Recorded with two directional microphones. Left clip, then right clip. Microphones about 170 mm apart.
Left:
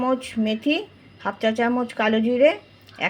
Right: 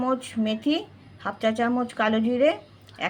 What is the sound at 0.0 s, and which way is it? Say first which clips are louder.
A woman's voice: left 3 dB; 20° left (ahead or behind).